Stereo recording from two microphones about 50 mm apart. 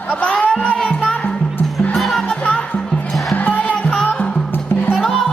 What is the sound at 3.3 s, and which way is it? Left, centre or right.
Music, left.